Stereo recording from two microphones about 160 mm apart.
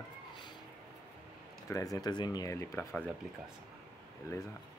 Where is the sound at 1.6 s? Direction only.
20° left (ahead or behind).